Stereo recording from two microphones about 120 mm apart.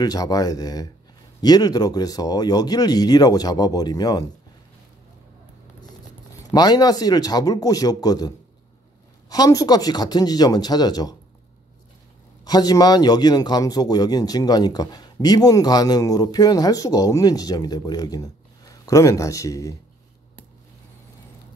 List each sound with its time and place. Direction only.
0.0 s a man's voice: 30° left (ahead or behind)
6.5 s a man's voice: 35° left (ahead or behind)
9.3 s a man's voice: 30° left (ahead or behind)
12.4 s a man's voice: 35° left (ahead or behind)